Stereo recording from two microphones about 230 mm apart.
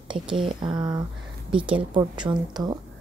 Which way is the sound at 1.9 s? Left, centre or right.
Centre.